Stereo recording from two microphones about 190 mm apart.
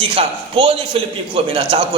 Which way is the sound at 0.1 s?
30° right (ahead or behind).